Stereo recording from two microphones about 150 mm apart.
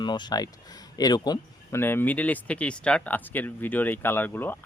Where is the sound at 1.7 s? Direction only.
15° left (ahead or behind).